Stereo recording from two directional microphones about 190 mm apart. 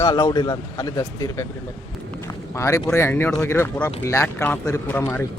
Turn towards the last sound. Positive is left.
turn(degrees=10)  # may be behind; listen again after turning